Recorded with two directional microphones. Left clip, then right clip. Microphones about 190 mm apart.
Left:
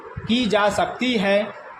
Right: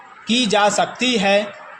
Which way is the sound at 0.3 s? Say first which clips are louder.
Right 3 dB; 35° right (ahead or behind).